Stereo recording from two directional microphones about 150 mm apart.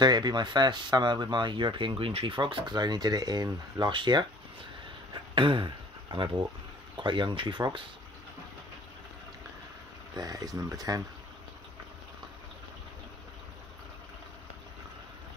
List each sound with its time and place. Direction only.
0.0 s speech: 30° right (ahead or behind)
5.1 s a sound: 35° right (ahead or behind)
6.1 s speech: 30° right (ahead or behind)
10.1 s speech: 25° right (ahead or behind)